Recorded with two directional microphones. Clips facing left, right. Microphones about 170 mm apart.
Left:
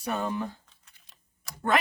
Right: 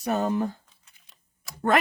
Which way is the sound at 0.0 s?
45° right (ahead or behind).